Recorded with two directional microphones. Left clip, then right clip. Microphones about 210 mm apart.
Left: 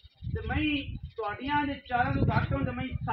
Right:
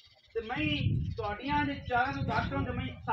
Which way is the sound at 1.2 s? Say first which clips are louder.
Left 2 dB; 40° left (ahead or behind).